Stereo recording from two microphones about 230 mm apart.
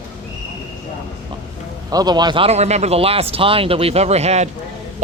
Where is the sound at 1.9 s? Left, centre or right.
Centre.